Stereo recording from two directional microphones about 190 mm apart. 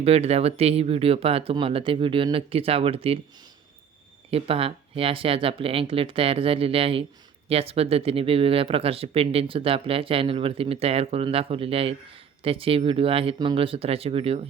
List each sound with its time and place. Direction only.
0.0 s speech: 35° right (ahead or behind)
4.3 s speech: 30° right (ahead or behind)